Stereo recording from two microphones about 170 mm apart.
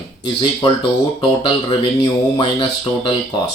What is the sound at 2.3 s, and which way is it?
Speech, 30° left (ahead or behind).